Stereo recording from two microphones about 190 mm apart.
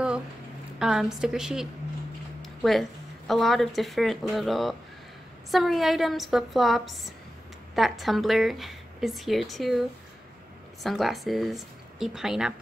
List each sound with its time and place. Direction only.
0.7 s speech: 5° right (ahead or behind)